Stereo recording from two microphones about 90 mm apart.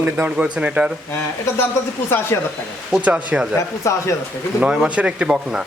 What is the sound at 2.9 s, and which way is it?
Speech, 15° right (ahead or behind).